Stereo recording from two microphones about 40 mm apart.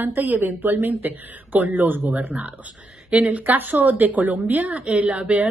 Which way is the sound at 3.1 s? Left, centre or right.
Right.